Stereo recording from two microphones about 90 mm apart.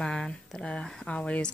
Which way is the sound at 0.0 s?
10° left (ahead or behind).